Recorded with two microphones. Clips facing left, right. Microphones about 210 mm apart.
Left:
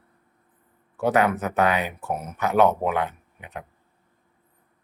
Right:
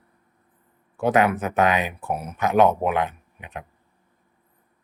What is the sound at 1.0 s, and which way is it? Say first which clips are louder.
Speech: right 1 dB; 15° right (ahead or behind).